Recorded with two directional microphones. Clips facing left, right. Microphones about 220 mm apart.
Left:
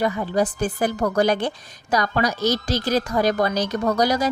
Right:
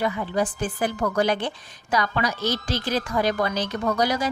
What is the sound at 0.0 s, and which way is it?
A woman's voice, 40° left (ahead or behind).